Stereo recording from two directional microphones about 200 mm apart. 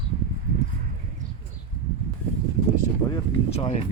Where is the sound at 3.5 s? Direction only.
30° left (ahead or behind).